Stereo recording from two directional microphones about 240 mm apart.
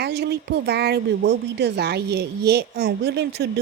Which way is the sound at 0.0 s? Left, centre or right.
Right.